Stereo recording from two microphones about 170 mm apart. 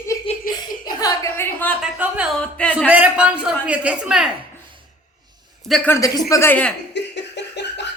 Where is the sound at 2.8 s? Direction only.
10° right (ahead or behind).